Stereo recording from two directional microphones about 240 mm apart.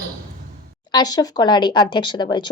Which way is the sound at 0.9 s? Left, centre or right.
Centre.